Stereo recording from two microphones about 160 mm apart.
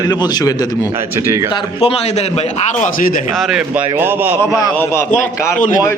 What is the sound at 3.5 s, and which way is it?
Speech, 10° right (ahead or behind).